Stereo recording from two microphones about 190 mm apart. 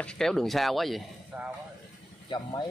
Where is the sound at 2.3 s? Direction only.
20° left (ahead or behind).